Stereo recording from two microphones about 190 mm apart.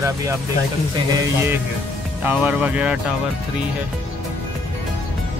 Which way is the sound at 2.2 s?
10° right (ahead or behind).